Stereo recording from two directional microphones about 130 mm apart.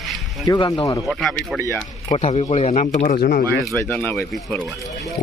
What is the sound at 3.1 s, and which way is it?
Speech, 80° left.